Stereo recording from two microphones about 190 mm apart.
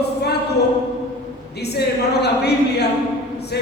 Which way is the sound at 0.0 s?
60° left (ahead or behind).